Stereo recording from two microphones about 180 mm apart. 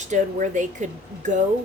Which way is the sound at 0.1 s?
45° right (ahead or behind).